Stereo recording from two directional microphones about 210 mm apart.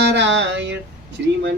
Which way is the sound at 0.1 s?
60° right (ahead or behind).